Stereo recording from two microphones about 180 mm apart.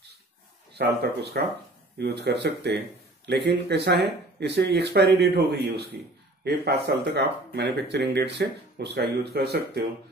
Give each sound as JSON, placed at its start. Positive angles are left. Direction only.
{"t": 0.7, "sound": "speech", "side_deg": -65}